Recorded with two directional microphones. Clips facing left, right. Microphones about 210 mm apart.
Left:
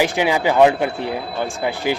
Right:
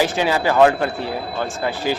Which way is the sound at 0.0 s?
15° left (ahead or behind).